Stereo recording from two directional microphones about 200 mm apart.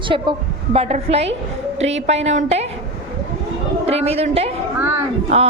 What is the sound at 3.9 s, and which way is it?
A woman's voice, 30° right (ahead or behind).